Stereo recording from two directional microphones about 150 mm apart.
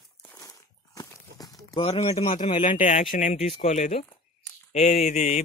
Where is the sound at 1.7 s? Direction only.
40° left (ahead or behind).